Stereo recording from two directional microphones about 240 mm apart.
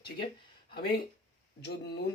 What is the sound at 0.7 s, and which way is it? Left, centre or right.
Speech, left.